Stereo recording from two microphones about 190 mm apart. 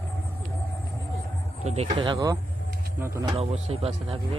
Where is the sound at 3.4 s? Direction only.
30° right (ahead or behind).